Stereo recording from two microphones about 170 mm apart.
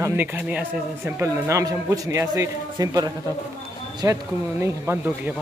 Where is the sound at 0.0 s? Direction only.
10° right (ahead or behind).